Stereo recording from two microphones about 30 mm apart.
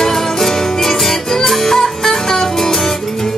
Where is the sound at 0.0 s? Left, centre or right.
Centre.